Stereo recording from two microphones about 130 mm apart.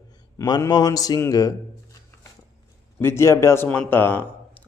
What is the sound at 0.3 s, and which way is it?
A man's voice, 25° left (ahead or behind).